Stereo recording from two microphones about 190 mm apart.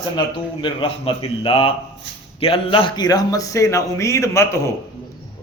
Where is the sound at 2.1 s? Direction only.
70° right (ahead or behind).